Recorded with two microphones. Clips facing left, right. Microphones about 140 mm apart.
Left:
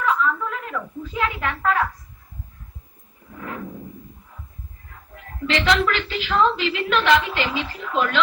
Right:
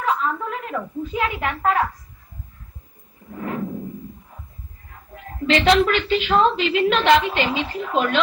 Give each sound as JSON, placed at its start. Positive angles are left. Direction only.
{"t": 0.0, "sound": "a woman's voice", "side_deg": -25}
{"t": 5.1, "sound": "a woman's voice", "side_deg": -25}